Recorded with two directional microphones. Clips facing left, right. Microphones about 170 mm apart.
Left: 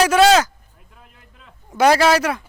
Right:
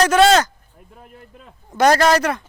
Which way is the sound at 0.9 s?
45° right (ahead or behind).